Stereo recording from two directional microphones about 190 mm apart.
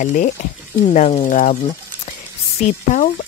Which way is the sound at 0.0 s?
45° left (ahead or behind).